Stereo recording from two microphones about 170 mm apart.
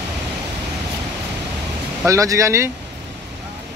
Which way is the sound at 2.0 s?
20° right (ahead or behind).